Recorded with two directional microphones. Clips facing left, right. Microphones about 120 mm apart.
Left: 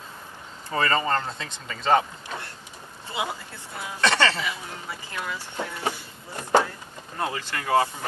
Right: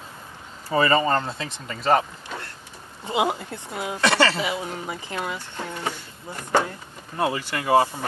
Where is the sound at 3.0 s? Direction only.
20° right (ahead or behind).